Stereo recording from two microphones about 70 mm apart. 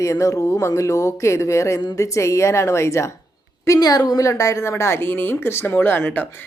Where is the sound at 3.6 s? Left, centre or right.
Left.